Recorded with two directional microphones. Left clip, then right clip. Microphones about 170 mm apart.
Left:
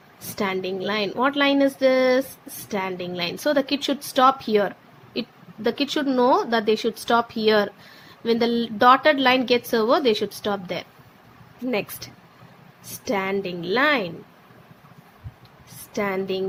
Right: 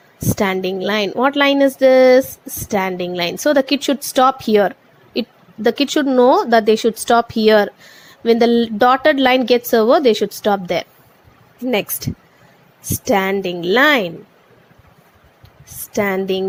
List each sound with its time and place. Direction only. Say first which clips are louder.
0.3 s a woman's voice: right 6 dB; 45° right (ahead or behind)
15.9 s a woman's voice: right 7 dB; 45° right (ahead or behind)